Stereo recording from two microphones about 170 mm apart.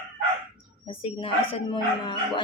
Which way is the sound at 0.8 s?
30° left (ahead or behind).